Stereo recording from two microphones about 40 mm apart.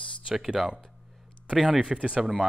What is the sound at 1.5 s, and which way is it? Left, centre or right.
Speech, centre.